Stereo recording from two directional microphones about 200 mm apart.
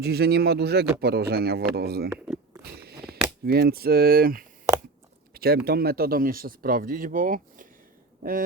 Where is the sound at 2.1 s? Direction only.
10° right (ahead or behind).